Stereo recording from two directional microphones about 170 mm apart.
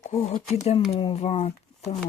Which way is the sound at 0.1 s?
40° left (ahead or behind).